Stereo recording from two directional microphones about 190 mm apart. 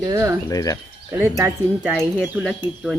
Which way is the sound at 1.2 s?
10° right (ahead or behind).